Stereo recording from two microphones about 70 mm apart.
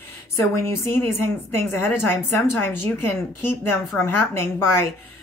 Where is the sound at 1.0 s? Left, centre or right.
Left.